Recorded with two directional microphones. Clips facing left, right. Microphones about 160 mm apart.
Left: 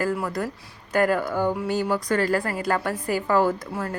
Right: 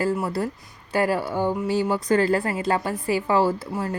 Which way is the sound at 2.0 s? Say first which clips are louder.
Right 3 dB; 30° right (ahead or behind).